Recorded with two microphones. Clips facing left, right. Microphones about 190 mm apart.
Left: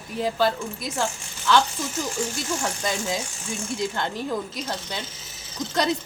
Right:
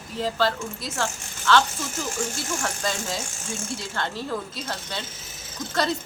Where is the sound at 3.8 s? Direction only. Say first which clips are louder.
Left 4 dB; 15° left (ahead or behind).